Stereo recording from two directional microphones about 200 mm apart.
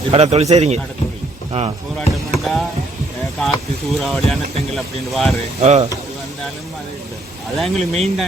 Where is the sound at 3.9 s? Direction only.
Centre (ahead or behind).